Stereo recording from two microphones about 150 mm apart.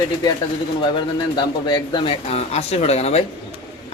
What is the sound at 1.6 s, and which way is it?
Speech, 30° left (ahead or behind).